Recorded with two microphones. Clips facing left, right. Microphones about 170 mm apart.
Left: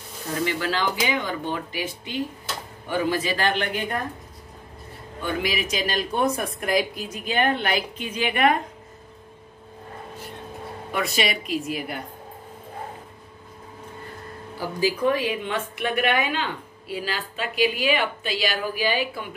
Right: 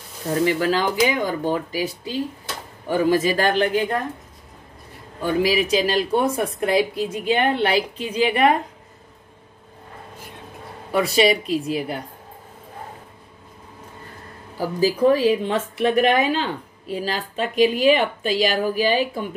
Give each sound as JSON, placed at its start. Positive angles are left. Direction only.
{"t": 0.5, "sound": "speech", "side_deg": -40}
{"t": 5.2, "sound": "speech", "side_deg": -35}
{"t": 10.9, "sound": "speech", "side_deg": -35}
{"t": 14.6, "sound": "speech", "side_deg": -40}